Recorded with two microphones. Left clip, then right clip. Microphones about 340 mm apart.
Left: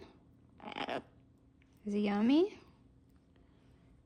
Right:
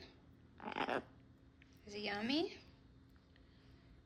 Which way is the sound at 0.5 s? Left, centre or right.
Centre.